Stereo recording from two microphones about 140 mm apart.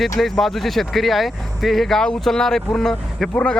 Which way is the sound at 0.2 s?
Centre (ahead or behind).